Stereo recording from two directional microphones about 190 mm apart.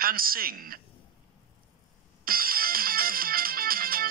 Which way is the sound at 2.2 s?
50° right (ahead or behind).